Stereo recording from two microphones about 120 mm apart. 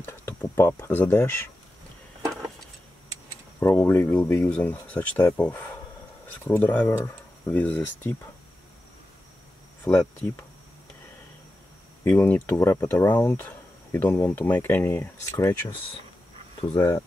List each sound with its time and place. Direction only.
0.0 s speech: 20° left (ahead or behind)
3.5 s speech: 20° left (ahead or behind)
9.8 s speech: 20° left (ahead or behind)
12.0 s speech: 20° left (ahead or behind)
16.6 s speech: 30° left (ahead or behind)